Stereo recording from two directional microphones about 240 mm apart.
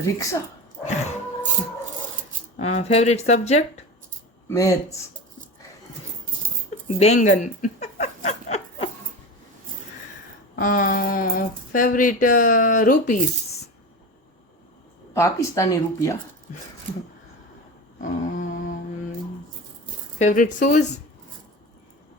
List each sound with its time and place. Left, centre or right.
0.2 s speech: centre
2.6 s speech: left
4.4 s speech: centre
6.8 s speech: left
10.5 s speech: left
15.1 s speech: centre
18.0 s humming: left
20.1 s speech: left